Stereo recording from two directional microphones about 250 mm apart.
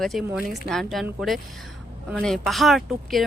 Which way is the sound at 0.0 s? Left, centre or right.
Centre.